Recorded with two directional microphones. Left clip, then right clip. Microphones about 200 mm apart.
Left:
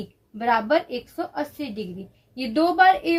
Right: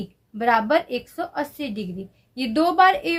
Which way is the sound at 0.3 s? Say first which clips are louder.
Right 2 dB; 40° right (ahead or behind).